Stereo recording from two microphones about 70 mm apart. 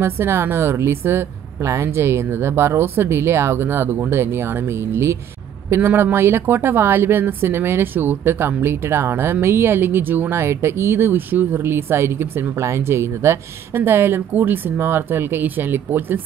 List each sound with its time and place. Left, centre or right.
0.0 s speech: right